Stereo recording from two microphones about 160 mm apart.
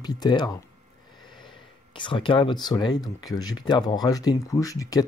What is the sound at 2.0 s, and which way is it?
Speech, 30° left (ahead or behind).